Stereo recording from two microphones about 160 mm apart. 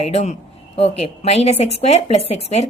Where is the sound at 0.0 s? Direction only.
40° left (ahead or behind).